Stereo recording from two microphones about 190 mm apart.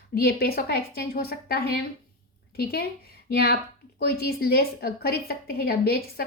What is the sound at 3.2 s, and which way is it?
A woman's voice, 55° left (ahead or behind).